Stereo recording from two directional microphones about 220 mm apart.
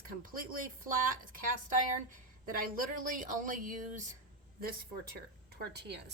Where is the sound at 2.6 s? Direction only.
40° right (ahead or behind).